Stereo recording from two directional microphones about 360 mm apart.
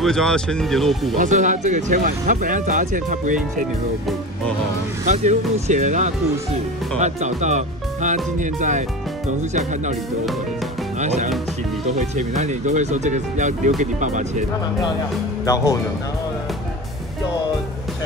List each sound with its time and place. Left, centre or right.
0.0 s speech: centre
1.1 s speech: right
5.0 s speech: centre
11.0 s speech: centre
15.4 s speech: centre